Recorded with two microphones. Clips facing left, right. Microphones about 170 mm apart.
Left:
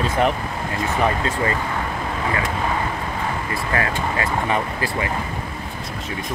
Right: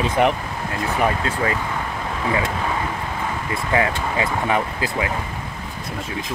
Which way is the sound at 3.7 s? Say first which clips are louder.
Right 3 dB; 15° right (ahead or behind).